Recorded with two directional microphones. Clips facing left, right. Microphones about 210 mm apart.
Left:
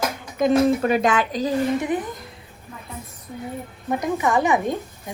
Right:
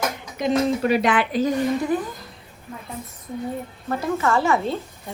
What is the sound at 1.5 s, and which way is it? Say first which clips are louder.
Speech: even; 20° left (ahead or behind).